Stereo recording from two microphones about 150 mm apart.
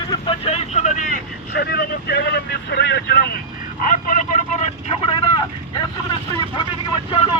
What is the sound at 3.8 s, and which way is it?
Vehicle, 65° left (ahead or behind).